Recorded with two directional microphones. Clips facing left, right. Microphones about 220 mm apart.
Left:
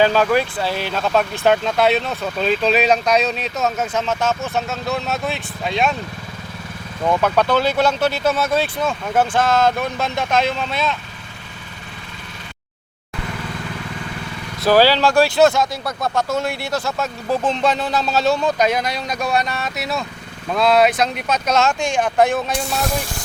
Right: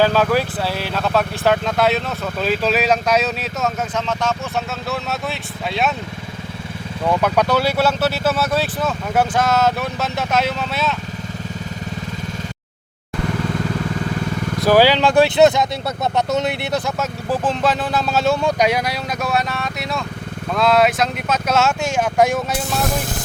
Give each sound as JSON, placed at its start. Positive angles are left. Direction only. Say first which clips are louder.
{"t": 0.2, "sound": "speech", "louder": "even", "side_deg": -5}
{"t": 3.9, "sound": "speech", "louder": "left 1 dB", "side_deg": 5}
{"t": 7.1, "sound": "speech", "louder": "even", "side_deg": -10}
{"t": 14.6, "sound": "speech", "louder": "even", "side_deg": -15}
{"t": 17.0, "sound": "speech", "louder": "left 1 dB", "side_deg": -5}